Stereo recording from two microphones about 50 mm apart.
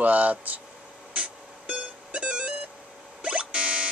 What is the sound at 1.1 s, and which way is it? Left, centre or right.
Music, right.